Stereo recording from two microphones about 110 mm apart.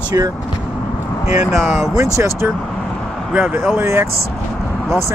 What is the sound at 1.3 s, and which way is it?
Speech, centre (ahead or behind).